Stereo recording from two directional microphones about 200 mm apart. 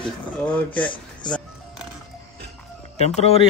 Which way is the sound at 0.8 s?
25° left (ahead or behind).